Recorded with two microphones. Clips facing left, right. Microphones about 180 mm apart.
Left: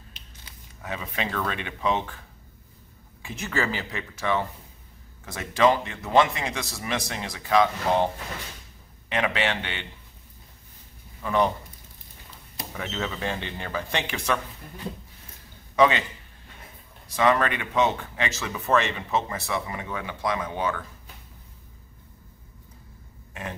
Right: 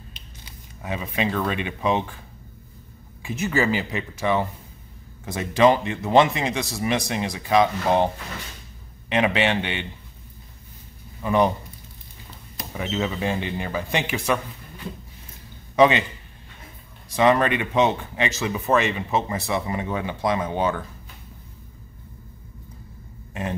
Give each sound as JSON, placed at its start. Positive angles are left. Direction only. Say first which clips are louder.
{"t": 0.1, "sound": "speech", "louder": "right 4 dB", "side_deg": -15}
{"t": 3.2, "sound": "speech", "louder": "right 5 dB", "side_deg": -5}
{"t": 9.1, "sound": "speech", "louder": "right 5 dB", "side_deg": -20}
{"t": 11.2, "sound": "speech", "louder": "right 3 dB", "side_deg": -15}
{"t": 12.7, "sound": "speech", "louder": "right 5 dB", "side_deg": -10}
{"t": 15.7, "sound": "a man's voice", "louder": "right 3 dB", "side_deg": -20}
{"t": 17.1, "sound": "speech", "louder": "right 4 dB", "side_deg": -20}